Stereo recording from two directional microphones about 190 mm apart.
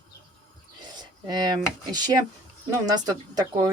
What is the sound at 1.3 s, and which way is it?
Speech, 20° right (ahead or behind).